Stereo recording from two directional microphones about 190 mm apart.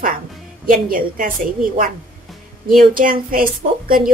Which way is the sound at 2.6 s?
45° right (ahead or behind).